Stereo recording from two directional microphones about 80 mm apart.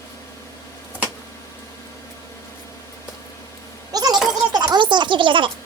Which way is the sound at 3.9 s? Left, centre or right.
Right.